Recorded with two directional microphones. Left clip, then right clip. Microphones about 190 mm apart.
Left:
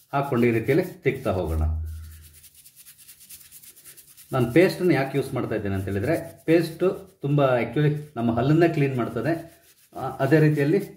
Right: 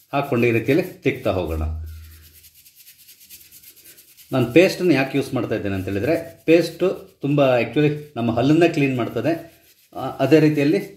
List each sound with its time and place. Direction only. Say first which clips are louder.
0.1 s speech: right 3 dB; 25° right (ahead or behind)
4.3 s speech: right 4 dB; 20° right (ahead or behind)